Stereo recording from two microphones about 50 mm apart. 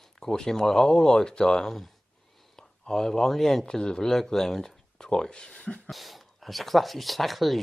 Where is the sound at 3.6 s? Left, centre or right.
Centre.